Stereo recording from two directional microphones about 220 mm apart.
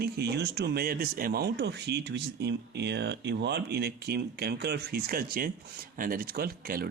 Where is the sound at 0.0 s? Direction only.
50° right (ahead or behind).